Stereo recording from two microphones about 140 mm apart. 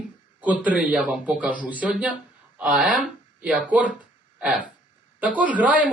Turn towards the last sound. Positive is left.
turn(degrees=-10)  # may be behind; listen again after turning